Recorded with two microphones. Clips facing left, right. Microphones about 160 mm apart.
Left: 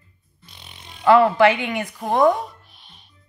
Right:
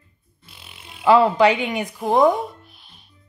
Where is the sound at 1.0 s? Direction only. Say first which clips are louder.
Even; 20° right (ahead or behind).